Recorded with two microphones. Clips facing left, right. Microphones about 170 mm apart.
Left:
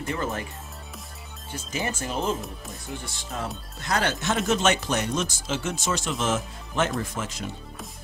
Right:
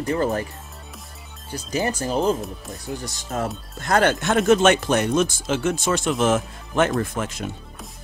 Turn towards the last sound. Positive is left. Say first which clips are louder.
# right 6 dB
turn(degrees=-55)  # may be behind; listen again after turning